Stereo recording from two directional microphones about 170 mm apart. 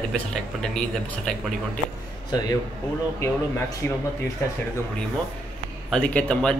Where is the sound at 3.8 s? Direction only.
15° left (ahead or behind).